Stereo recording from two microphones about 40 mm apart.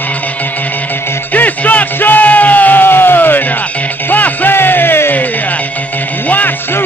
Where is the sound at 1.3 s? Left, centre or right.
Left.